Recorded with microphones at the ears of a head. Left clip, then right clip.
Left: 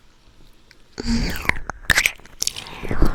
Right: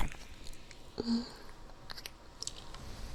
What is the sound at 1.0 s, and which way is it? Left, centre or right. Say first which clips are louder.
Biting: left 12 dB; left.